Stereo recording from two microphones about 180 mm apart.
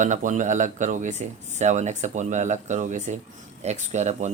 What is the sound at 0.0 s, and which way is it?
Speech, 45° right (ahead or behind).